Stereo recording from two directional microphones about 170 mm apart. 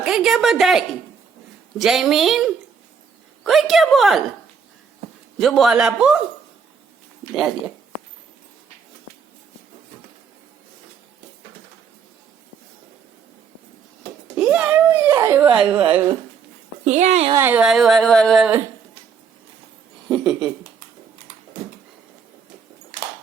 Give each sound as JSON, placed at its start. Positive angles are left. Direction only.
{"t": 0.0, "sound": "speech", "side_deg": 0}
{"t": 5.4, "sound": "speech", "side_deg": 0}
{"t": 7.3, "sound": "speech", "side_deg": 0}
{"t": 14.3, "sound": "a child's voice", "side_deg": -5}
{"t": 16.8, "sound": "speech", "side_deg": -45}
{"t": 17.3, "sound": "speech", "side_deg": -10}
{"t": 20.1, "sound": "speech", "side_deg": 0}